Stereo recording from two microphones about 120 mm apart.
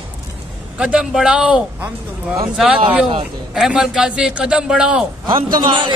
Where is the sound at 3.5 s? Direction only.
5° right (ahead or behind).